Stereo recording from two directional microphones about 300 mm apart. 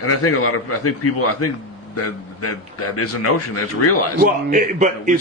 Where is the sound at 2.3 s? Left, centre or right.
Left.